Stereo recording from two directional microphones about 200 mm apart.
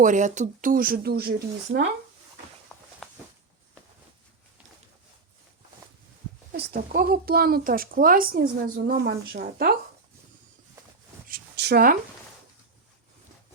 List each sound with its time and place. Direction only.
0.0 s speech: 40° right (ahead or behind)
2.7 s walk: centre (ahead or behind)
6.5 s speech: 50° right (ahead or behind)
11.3 s a sound: 50° right (ahead or behind)